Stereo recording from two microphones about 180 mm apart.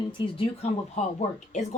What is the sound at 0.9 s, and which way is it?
Speech, 40° left (ahead or behind).